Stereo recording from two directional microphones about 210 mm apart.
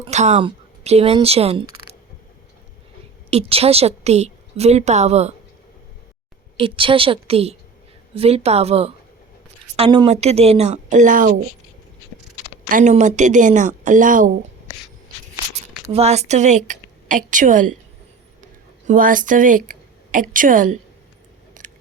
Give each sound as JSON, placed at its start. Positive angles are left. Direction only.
{"t": 0.0, "sound": "speech", "side_deg": -35}
{"t": 3.2, "sound": "a woman's voice", "side_deg": -30}
{"t": 6.6, "sound": "a woman's voice", "side_deg": -25}
{"t": 12.6, "sound": "a woman's voice", "side_deg": -35}
{"t": 15.9, "sound": "a woman's voice", "side_deg": -30}
{"t": 18.9, "sound": "a woman's voice", "side_deg": -40}
{"t": 21.6, "sound": "a sound", "side_deg": -40}